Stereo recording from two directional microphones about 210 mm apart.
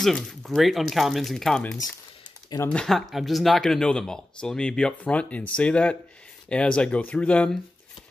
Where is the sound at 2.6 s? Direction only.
5° left (ahead or behind).